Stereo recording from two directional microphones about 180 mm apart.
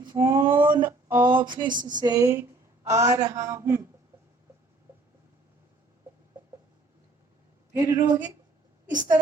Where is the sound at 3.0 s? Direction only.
20° right (ahead or behind).